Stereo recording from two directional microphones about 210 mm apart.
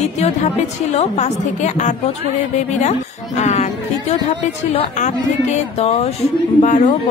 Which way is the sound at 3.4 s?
30° left (ahead or behind).